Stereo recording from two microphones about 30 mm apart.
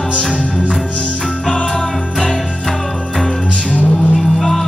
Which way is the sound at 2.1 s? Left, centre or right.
Centre.